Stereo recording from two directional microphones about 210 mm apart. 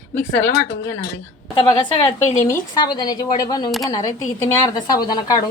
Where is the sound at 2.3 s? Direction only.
15° left (ahead or behind).